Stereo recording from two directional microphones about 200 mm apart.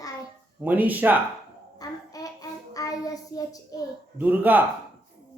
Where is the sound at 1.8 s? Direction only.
20° left (ahead or behind).